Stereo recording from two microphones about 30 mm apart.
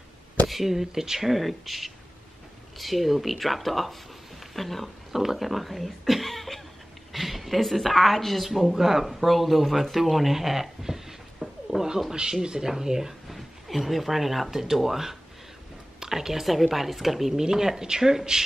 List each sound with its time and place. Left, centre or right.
0.5 s speech: centre
1.3 s a woman's voice: centre
5.1 s a woman's voice: centre
11.4 s a sound: left
12.1 s speech: centre
13.3 s speech: centre
17.4 s speech: centre